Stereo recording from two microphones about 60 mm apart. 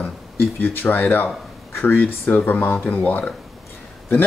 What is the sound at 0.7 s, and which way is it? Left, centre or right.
Speech, left.